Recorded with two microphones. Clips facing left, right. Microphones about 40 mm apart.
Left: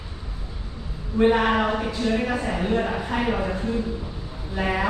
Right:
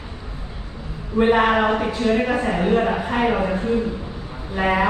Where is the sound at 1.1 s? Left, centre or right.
Right.